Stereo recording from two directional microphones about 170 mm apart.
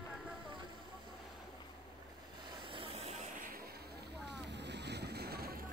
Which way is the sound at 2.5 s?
30° right (ahead or behind).